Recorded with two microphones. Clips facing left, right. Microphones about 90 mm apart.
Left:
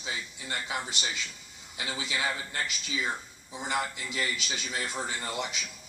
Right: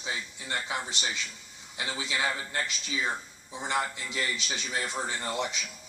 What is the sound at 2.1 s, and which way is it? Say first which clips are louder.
Speech: right 2 dB; 30° right (ahead or behind).